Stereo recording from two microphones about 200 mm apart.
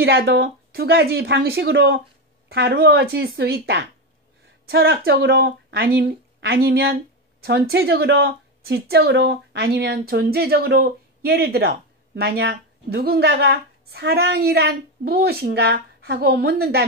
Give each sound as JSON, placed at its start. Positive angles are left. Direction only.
{"t": 0.0, "sound": "a woman's voice", "side_deg": -55}